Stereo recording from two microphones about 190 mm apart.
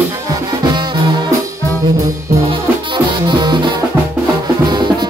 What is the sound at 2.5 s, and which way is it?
Music, 25° right (ahead or behind).